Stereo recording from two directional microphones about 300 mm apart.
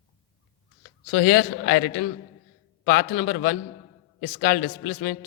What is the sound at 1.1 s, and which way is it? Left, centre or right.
Speech, left.